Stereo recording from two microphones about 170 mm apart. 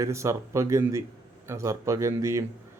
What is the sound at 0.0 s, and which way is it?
A man's voice, 15° right (ahead or behind).